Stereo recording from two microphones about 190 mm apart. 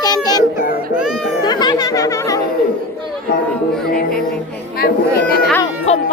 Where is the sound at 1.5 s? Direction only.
20° left (ahead or behind).